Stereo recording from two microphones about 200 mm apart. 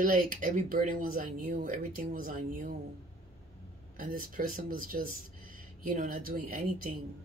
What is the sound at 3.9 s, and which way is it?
Speech, 45° right (ahead or behind).